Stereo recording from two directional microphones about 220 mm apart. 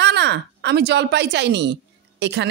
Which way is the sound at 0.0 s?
50° right (ahead or behind).